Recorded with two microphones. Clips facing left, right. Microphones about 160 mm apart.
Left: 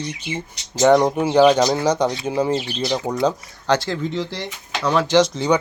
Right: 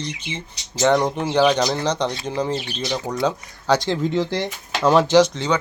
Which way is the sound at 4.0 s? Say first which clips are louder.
Right 4 dB; 50° right (ahead or behind).